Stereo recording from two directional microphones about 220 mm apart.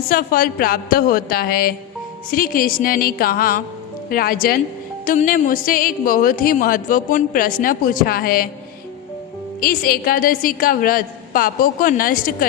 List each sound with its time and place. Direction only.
0.1 s a woman's voice: 40° left (ahead or behind)
9.6 s a woman's voice: 40° left (ahead or behind)